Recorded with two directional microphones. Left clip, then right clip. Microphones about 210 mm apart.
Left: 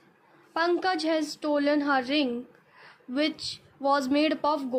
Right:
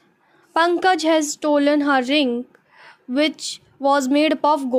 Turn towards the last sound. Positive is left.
turn(degrees=-35)  # may be behind; listen again after turning